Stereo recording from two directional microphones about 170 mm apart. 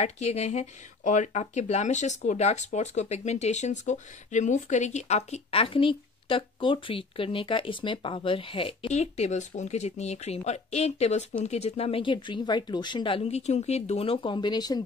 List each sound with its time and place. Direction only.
0.0 s speech: 40° left (ahead or behind); by 14.8 s 25° left (ahead or behind)